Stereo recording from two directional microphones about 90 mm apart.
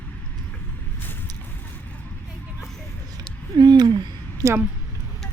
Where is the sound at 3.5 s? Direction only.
50° right (ahead or behind).